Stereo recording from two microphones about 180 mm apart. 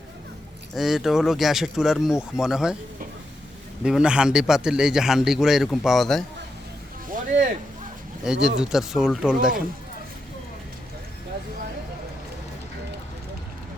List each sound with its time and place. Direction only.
0.7 s a man's voice: centre (ahead or behind)
3.8 s a man's voice: 5° right (ahead or behind)
7.1 s a sound: 45° right (ahead or behind)
8.2 s a man's voice: 5° right (ahead or behind)